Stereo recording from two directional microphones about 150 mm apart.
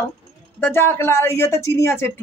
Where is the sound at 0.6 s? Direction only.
15° left (ahead or behind).